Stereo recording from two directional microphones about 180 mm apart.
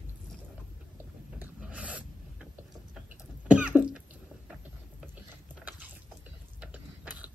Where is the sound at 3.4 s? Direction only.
5° right (ahead or behind).